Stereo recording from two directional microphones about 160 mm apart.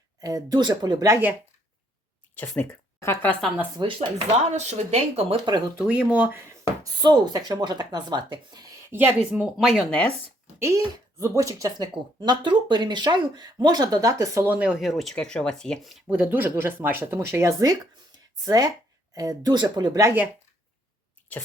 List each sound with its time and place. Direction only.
0.2 s speech: 25° right (ahead or behind)
2.3 s speech: 10° left (ahead or behind)
3.8 s speech: 30° right (ahead or behind)
4.4 s speech: 45° right (ahead or behind)
5.7 s speech: 10° right (ahead or behind)
6.8 s speech: 25° right (ahead or behind)
9.3 s speech: 5° right (ahead or behind)
10.6 s speech: 20° right (ahead or behind)